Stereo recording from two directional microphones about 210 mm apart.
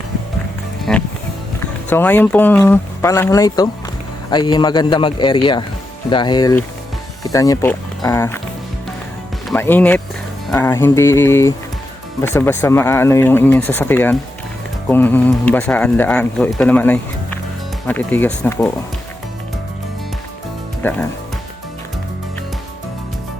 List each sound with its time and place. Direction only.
0.9 s music: 5° left (ahead or behind)
1.9 s a man's voice: 10° left (ahead or behind)
9.5 s speech: 10° left (ahead or behind)
20.8 s speech: 10° left (ahead or behind)